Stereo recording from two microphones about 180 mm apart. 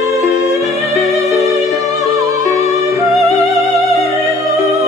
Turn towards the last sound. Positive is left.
turn(degrees=15)  # may be behind; listen again after turning